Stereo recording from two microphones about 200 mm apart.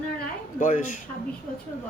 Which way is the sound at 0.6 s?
40° left (ahead or behind).